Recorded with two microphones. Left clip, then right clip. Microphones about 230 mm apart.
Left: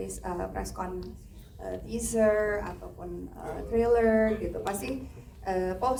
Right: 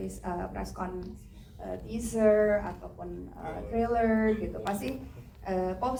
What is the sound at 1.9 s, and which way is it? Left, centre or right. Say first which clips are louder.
Speech: even; left.